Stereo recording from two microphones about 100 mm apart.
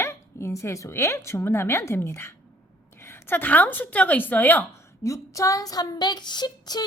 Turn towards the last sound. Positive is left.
turn(degrees=45)  # may be behind; listen again after turning